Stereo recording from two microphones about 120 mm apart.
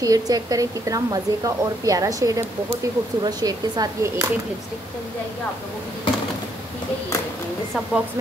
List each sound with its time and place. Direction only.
0.0 s a woman's voice: 30° right (ahead or behind)